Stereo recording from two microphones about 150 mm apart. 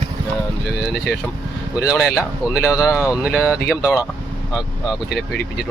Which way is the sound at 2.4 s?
5° right (ahead or behind).